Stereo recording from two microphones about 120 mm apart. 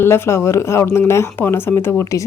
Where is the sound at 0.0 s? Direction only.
20° left (ahead or behind).